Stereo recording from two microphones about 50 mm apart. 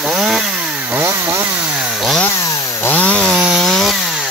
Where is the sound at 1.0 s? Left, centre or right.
Right.